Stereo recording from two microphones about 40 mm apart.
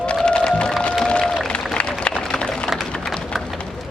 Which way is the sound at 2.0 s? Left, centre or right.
Left.